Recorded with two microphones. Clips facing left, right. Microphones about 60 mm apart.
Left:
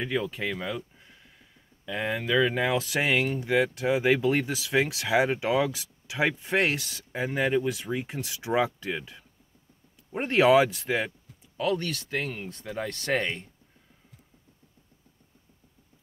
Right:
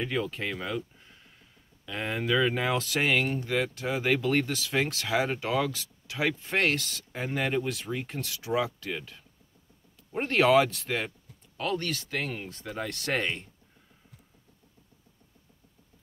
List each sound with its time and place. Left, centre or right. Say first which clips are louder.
0.0 s speech: left 1 dB; centre
1.9 s speech: left 1 dB; centre
8.5 s speech: left 3 dB; left; by 13.2 s centre